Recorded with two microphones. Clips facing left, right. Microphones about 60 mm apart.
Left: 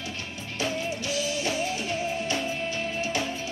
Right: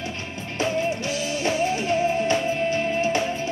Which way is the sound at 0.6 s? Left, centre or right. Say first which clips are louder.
Right 6 dB; right.